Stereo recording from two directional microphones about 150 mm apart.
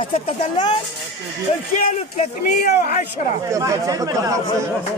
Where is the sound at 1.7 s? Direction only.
55° left (ahead or behind).